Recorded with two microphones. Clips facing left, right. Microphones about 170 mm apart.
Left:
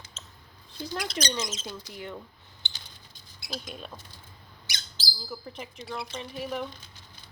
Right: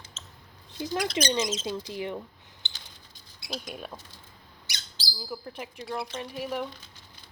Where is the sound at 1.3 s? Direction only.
20° right (ahead or behind).